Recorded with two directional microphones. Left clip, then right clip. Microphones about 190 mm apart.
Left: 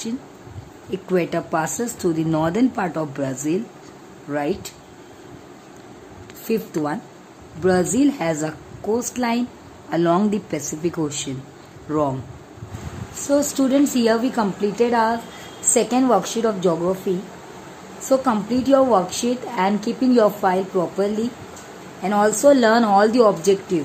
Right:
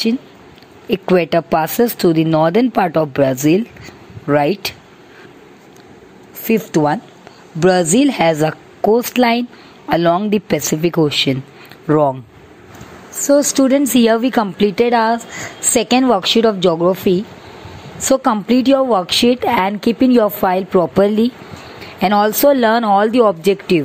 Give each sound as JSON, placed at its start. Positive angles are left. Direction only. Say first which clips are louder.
{"t": 0.8, "sound": "a woman's voice", "louder": "right 8 dB", "side_deg": -35}
{"t": 6.4, "sound": "a woman's voice", "louder": "right 8 dB", "side_deg": -35}
{"t": 13.3, "sound": "a woman's voice", "louder": "right 7 dB", "side_deg": -40}
{"t": 18.0, "sound": "a woman's voice", "louder": "right 5 dB", "side_deg": -40}